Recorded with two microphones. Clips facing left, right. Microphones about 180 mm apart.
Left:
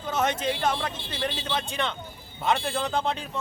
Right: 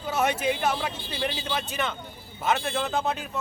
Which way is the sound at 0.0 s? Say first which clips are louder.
Right 1 dB; 10° right (ahead or behind).